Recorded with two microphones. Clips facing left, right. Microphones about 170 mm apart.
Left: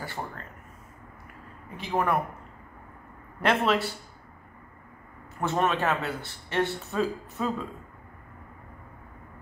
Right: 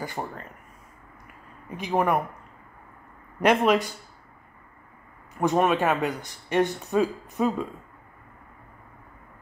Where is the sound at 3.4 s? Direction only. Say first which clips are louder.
Right 4 dB; 15° right (ahead or behind).